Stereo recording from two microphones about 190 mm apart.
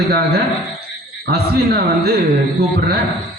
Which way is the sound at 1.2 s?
55° right (ahead or behind).